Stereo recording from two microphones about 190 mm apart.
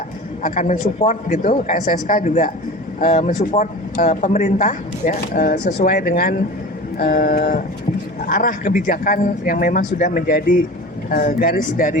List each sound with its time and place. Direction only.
0.4 s speech: 40° left (ahead or behind)